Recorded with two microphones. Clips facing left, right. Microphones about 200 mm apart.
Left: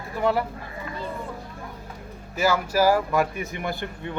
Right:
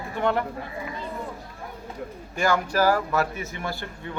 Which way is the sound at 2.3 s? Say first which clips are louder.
Left 1 dB; 5° left (ahead or behind).